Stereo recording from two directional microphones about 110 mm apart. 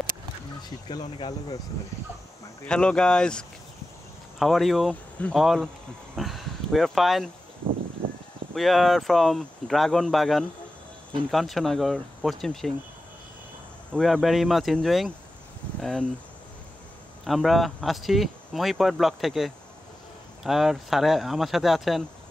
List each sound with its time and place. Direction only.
0.8 s speech: 45° left (ahead or behind)
2.6 s speech: 10° left (ahead or behind)
6.1 s a sound: centre (ahead or behind)
8.5 s speech: centre (ahead or behind)
13.9 s speech: centre (ahead or behind)
17.2 s speech: centre (ahead or behind)